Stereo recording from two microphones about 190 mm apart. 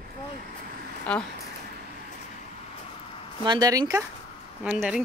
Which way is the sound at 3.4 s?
20° right (ahead or behind).